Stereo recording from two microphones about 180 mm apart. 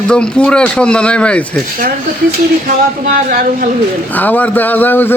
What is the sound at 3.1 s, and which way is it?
Speech, 50° right (ahead or behind).